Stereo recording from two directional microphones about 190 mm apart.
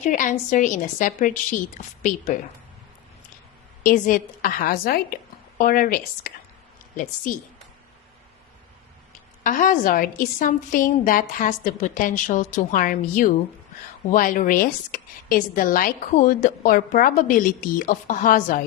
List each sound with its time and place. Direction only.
0.0 s a woman's voice: 40° left (ahead or behind)
3.8 s a woman's voice: 45° left (ahead or behind)
9.4 s a woman's voice: 45° left (ahead or behind)